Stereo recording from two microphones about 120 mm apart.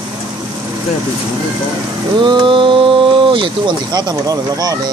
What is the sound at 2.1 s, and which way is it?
Speech, 40° right (ahead or behind).